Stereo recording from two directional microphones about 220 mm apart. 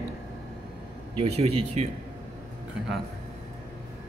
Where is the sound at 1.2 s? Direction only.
30° right (ahead or behind).